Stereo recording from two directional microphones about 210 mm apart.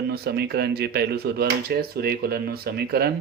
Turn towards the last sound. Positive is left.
turn(degrees=-50)  # may be behind; listen again after turning